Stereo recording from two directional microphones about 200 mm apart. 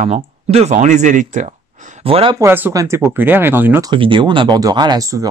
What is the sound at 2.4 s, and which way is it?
Speech, 10° right (ahead or behind).